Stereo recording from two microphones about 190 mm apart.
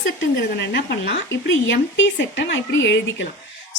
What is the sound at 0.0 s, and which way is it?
Speech, 75° left (ahead or behind).